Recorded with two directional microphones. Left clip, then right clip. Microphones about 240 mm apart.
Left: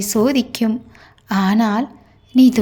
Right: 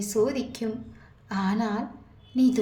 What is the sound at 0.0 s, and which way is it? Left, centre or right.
A woman's voice, left.